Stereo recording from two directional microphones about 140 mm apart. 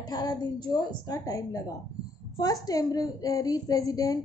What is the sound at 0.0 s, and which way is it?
A woman's voice, 30° left (ahead or behind).